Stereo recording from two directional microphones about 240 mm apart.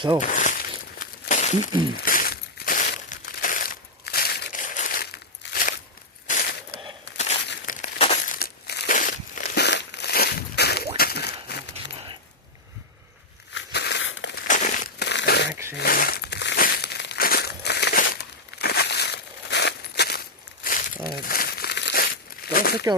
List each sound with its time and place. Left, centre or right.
0.2 s crumpling: left
6.2 s a sound: left
7.4 s crumpling: left
7.8 s crumpling: left
10.9 s a sound: left
13.5 s crumpling: left